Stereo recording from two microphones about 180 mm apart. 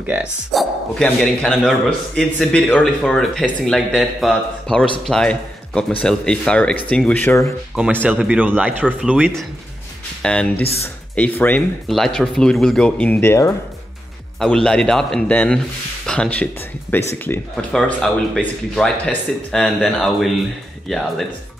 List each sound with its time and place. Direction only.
0.0 s speech: 5° right (ahead or behind); by 7.5 s 15° left (ahead or behind)
7.7 s speech: 5° right (ahead or behind)
10.2 s speech: 5° left (ahead or behind)
10.5 s speech: 35° left (ahead or behind)
11.1 s speech: 10° left (ahead or behind)
14.4 s speech: 5° left (ahead or behind)